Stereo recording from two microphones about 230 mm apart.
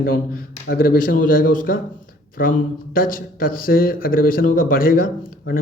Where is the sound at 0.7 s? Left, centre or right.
Left.